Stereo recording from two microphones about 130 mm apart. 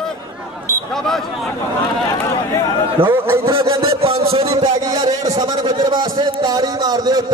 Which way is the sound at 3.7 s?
45° right (ahead or behind).